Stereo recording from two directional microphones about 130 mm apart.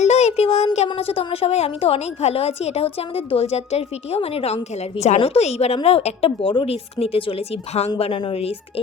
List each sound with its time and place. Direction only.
0.0 s a child's voice: 60° left (ahead or behind)